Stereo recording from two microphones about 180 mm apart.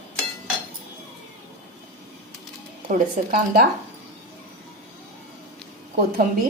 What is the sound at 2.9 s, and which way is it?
Speech, 55° right (ahead or behind).